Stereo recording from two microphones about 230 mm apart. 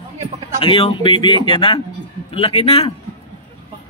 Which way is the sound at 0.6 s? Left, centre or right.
Left.